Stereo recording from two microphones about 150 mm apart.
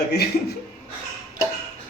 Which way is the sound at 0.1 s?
90° left.